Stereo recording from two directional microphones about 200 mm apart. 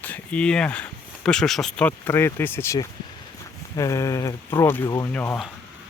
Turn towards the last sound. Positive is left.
turn(degrees=10)  # may be behind; listen again after turning